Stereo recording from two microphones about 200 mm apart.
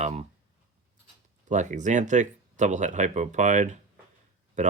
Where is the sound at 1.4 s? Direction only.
40° right (ahead or behind).